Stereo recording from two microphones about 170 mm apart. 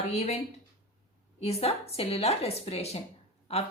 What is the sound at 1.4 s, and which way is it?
A woman's voice, 35° left (ahead or behind).